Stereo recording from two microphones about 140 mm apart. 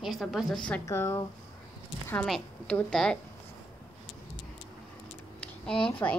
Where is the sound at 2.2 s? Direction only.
5° left (ahead or behind).